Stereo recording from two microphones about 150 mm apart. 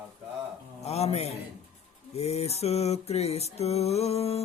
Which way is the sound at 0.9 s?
45° left (ahead or behind).